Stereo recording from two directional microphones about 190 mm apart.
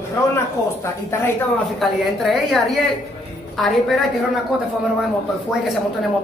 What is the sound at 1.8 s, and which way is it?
A man's voice, centre (ahead or behind).